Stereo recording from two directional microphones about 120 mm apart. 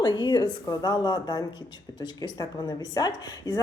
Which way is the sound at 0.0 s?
40° left (ahead or behind).